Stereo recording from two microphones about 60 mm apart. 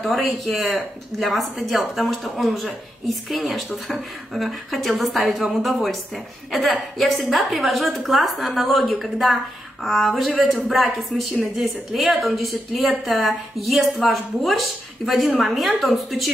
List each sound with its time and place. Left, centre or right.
0.0 s speech: centre
7.0 s speech: centre